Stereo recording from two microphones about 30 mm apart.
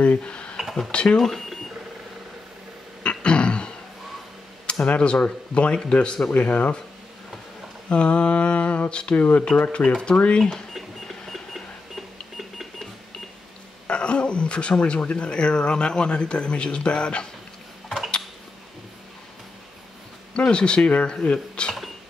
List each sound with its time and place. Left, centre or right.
0.0 s speech: left
0.6 s a sound: centre
1.0 s speech: centre
3.0 s throat clearing: left
4.6 s speech: left
6.3 s speech: left
7.9 s mantra: left
9.1 s speech: left
9.6 s speech: left
11.1 s alarm clock: centre
13.8 s a sound: left
15.1 s speech: left
20.3 s speech: left